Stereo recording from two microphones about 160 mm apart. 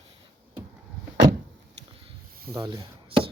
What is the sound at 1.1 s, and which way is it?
Vehicle, 90° right.